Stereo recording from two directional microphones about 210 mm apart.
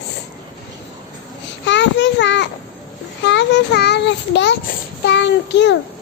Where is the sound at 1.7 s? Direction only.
60° left (ahead or behind).